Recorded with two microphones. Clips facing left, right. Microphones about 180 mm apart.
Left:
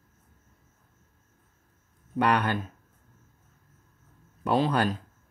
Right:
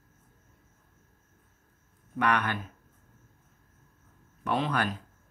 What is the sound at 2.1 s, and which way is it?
Speech, 30° left (ahead or behind).